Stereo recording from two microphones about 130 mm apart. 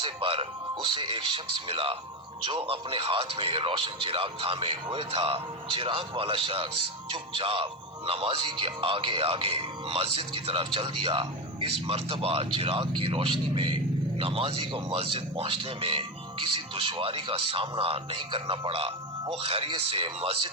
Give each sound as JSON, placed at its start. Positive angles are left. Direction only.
{"t": 0.0, "sound": "speech", "side_deg": -45}